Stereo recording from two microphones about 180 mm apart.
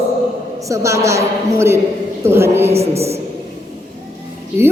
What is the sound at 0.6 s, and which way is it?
A woman's voice, 15° right (ahead or behind).